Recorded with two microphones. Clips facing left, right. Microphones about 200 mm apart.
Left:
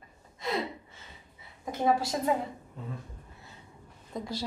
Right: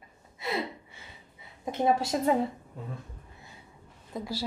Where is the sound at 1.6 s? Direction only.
25° right (ahead or behind).